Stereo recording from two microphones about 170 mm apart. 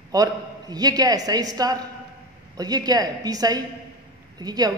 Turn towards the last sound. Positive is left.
turn(degrees=-20)  # may be behind; listen again after turning